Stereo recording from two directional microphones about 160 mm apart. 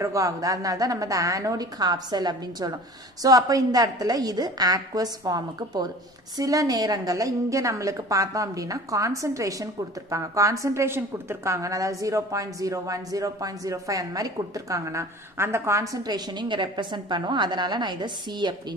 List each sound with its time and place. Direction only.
0.0 s a woman's voice: 20° right (ahead or behind)